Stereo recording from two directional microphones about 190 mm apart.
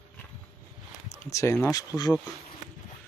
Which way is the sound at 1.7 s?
20° left (ahead or behind).